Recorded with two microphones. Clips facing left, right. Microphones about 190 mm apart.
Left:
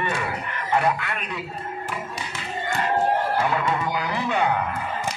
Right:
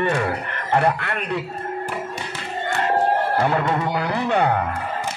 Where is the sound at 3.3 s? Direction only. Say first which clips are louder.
Right 3 dB; 50° right (ahead or behind).